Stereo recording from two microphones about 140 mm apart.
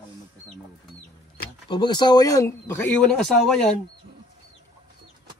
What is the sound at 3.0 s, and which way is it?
Speech, 5° left (ahead or behind).